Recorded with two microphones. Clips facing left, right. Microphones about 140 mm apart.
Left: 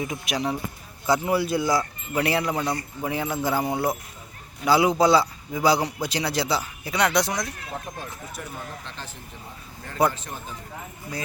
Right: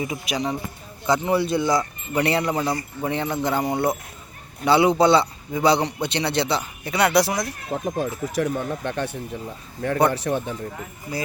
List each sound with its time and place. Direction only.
0.0 s a man's voice: centre (ahead or behind)
7.9 s speech: 90° right; by 10.5 s 70° right (ahead or behind)